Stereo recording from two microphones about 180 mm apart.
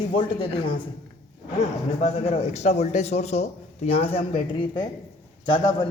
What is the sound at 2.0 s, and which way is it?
A man's voice, 35° left (ahead or behind).